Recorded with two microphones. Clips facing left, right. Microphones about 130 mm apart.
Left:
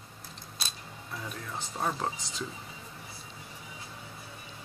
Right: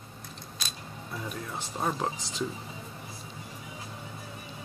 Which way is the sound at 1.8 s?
10° right (ahead or behind).